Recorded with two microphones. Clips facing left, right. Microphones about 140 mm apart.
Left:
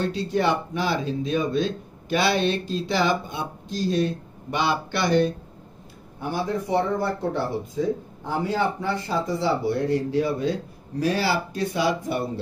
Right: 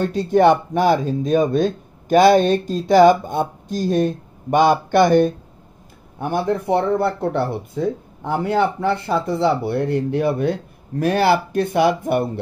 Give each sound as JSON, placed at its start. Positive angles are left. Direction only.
{"t": 0.0, "sound": "speech", "side_deg": -50}